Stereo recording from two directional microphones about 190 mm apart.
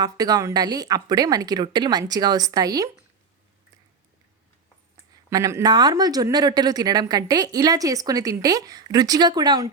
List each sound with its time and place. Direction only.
0.0 s speech: 20° right (ahead or behind)
5.1 s speech: 20° right (ahead or behind)